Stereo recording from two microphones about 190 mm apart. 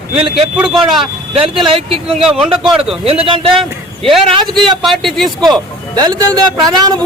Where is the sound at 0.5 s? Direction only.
5° right (ahead or behind).